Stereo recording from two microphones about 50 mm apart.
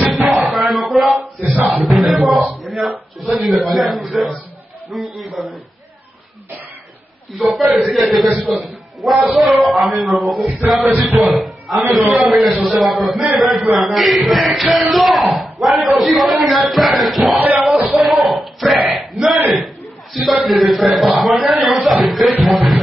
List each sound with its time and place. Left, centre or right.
0.1 s music: centre
2.0 s a man's voice: centre
7.3 s a man's voice: centre
10.8 s speech: right
11.1 s a man's voice: centre
17.6 s a sound: centre
20.2 s a man's voice: centre